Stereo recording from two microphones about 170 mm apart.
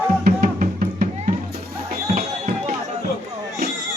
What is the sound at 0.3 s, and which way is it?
Music, 50° right (ahead or behind).